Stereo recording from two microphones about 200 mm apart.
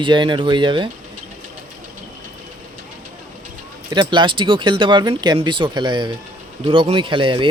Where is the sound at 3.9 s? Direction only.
20° right (ahead or behind).